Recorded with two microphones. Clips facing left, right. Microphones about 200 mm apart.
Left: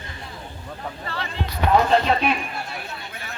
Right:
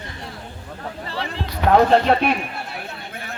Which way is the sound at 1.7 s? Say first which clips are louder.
Right 4 dB; 55° right (ahead or behind).